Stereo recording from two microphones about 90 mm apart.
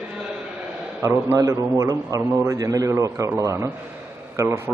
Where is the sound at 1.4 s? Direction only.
35° right (ahead or behind).